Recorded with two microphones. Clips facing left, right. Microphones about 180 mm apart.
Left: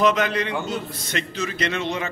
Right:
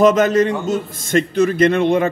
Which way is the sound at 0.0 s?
45° right (ahead or behind).